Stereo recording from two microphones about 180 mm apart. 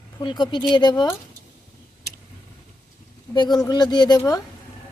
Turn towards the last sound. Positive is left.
turn(degrees=20)  # may be behind; listen again after turning